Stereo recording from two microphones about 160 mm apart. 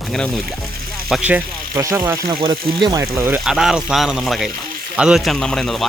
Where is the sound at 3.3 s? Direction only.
Centre (ahead or behind).